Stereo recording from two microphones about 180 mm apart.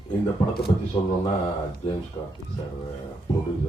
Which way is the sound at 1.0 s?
25° left (ahead or behind).